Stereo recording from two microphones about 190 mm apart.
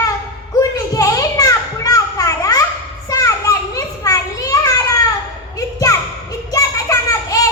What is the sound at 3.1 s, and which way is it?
Children playing, 15° left (ahead or behind).